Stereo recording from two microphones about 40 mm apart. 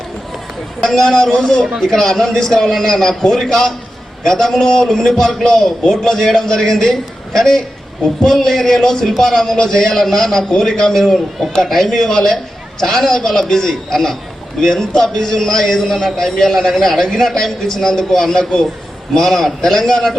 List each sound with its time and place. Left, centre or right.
0.8 s a man's voice: centre